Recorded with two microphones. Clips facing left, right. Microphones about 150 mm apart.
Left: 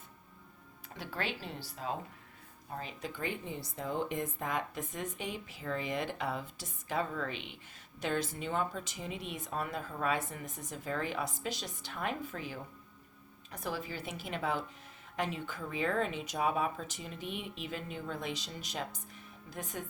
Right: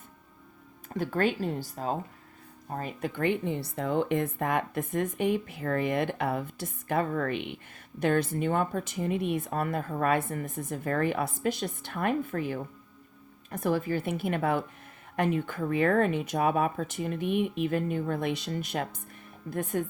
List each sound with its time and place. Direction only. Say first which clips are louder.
0.9 s speech: right 12 dB; 50° right (ahead or behind)